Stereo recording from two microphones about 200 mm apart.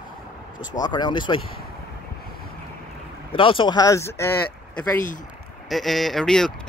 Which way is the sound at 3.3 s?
25° left (ahead or behind).